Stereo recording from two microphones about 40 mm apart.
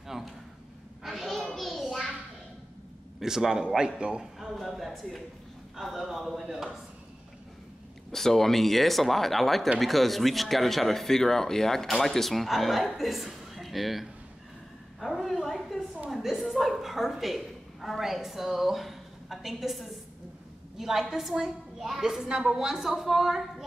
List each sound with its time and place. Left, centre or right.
0.1 s a sound: centre
1.0 s a sound: centre
3.2 s a woman's voice: centre
4.4 s speech: centre
6.4 s a woman's voice: centre
8.1 s speech: centre
15.0 s a sound: centre
20.7 s a woman's voice: centre
22.0 s a woman's voice: centre